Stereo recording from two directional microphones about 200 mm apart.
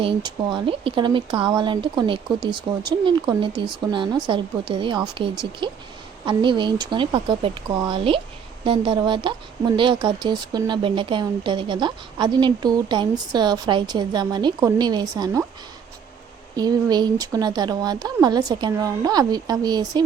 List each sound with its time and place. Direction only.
0.0 s speech: 25° right (ahead or behind)
16.6 s speech: 20° right (ahead or behind)